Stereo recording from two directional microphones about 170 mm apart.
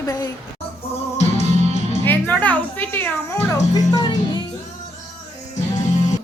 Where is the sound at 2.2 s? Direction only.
10° left (ahead or behind).